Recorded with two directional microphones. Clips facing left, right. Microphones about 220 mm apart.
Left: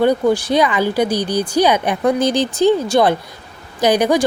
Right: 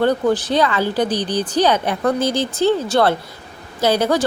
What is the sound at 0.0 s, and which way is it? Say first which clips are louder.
Speech: left 2 dB; 10° left (ahead or behind).